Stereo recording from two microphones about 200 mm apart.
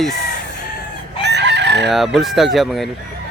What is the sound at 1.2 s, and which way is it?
Chicken, 60° right (ahead or behind).